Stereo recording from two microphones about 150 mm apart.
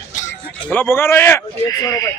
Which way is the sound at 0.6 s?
15° left (ahead or behind).